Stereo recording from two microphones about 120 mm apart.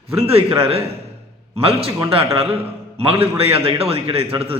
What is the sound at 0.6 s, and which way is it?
A man's voice, 55° right (ahead or behind).